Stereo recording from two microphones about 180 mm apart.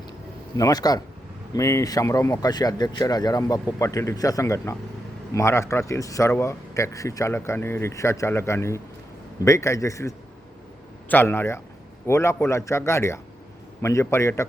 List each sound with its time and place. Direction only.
0.5 s speech: 20° left (ahead or behind)